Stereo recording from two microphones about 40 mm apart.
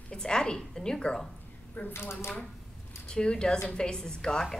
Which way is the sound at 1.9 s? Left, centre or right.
Left.